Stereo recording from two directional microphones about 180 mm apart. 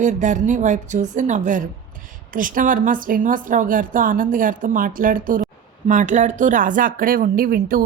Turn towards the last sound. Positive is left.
turn(degrees=-55)  # may be behind; listen again after turning